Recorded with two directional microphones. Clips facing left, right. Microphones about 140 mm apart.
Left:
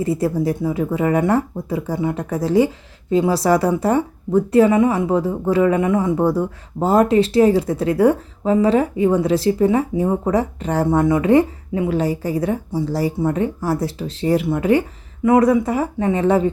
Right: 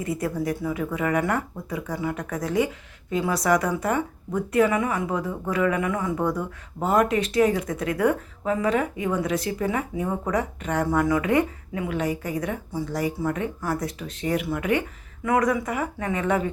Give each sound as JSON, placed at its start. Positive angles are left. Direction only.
{"t": 0.0, "sound": "speech", "side_deg": 30}